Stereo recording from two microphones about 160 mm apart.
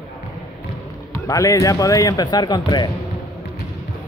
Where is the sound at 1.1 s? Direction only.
20° left (ahead or behind).